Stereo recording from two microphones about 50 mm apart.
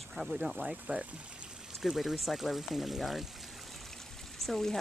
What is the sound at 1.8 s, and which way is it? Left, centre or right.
Speech, centre.